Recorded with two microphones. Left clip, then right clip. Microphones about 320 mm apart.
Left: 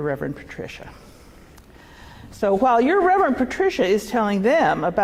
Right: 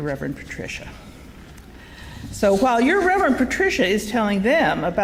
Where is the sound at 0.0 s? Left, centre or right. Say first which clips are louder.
Left 2 dB; left.